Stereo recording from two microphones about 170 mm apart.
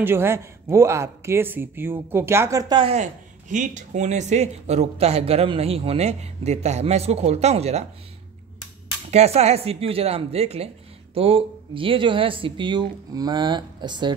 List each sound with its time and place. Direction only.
0.0 s speech: 15° right (ahead or behind)
2.7 s speech: 30° right (ahead or behind)
3.0 s speech: 50° right (ahead or behind)
9.1 s speech: 40° right (ahead or behind)